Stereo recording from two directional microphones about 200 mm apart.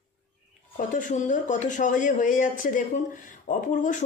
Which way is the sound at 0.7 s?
40° left (ahead or behind).